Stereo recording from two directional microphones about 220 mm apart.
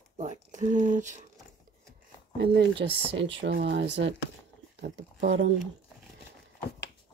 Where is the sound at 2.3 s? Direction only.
50° right (ahead or behind).